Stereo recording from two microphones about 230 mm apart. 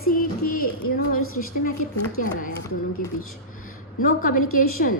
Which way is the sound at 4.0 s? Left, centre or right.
Left.